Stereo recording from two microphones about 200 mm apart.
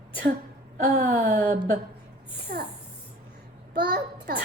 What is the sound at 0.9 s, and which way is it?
Speech, 55° right (ahead or behind).